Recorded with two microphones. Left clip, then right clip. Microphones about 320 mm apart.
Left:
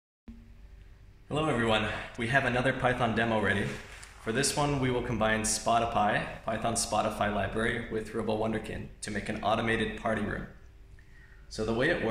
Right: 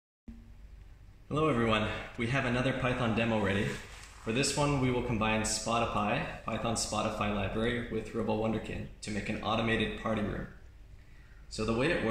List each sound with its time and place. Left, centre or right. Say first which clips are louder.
1.3 s speech: left 1 dB; left
11.5 s speech: left 2 dB; left